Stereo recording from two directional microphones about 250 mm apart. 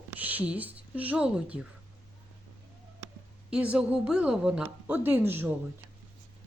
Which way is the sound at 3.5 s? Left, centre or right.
Centre.